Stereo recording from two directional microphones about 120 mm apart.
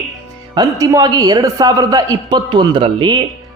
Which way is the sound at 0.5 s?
30° right (ahead or behind).